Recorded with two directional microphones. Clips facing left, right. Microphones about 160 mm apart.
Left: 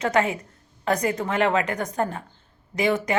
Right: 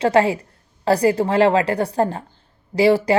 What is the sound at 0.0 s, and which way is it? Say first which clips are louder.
A woman's voice: right 6 dB; 30° right (ahead or behind).